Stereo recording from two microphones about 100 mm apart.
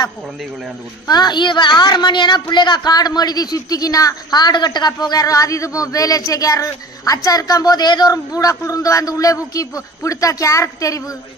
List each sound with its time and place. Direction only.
1.0 s a woman's voice: 45° left (ahead or behind)